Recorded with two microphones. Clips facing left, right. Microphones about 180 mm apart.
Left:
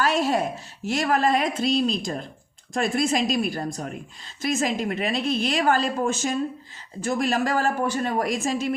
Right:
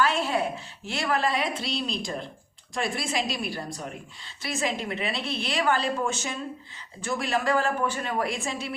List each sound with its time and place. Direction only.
0.0 s a woman's voice: 40° left (ahead or behind)